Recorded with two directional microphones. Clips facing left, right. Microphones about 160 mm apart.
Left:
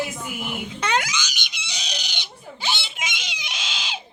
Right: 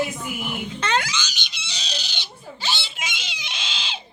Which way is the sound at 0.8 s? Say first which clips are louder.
Even; 15° left (ahead or behind).